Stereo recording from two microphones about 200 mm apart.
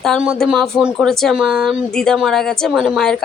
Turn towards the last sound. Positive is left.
turn(degrees=0)  # may be behind; listen again after turning